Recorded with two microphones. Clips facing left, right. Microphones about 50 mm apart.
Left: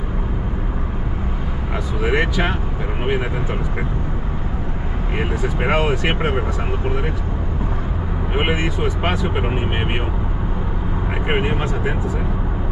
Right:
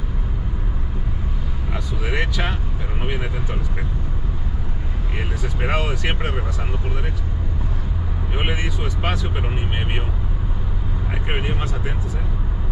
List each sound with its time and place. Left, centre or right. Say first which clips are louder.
2.0 s speech: left 6 dB; centre
5.1 s speech: left 7 dB; centre
8.4 s speech: left 6 dB; centre
11.2 s speech: left 6 dB; centre